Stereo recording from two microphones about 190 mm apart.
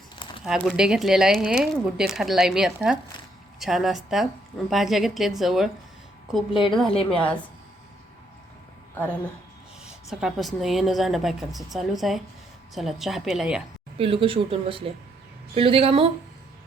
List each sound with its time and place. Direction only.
0.2 s a sound: 25° left (ahead or behind)
0.4 s speech: centre (ahead or behind)
9.8 s speech: 5° right (ahead or behind)
14.0 s speech: 30° right (ahead or behind)